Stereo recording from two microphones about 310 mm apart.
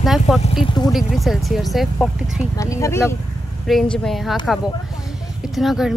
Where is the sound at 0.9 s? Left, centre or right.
Centre.